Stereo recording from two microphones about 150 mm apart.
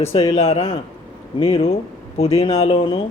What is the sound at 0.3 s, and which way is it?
A woman's voice, 40° left (ahead or behind).